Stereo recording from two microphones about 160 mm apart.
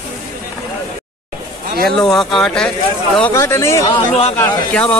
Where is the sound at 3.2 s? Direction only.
15° left (ahead or behind).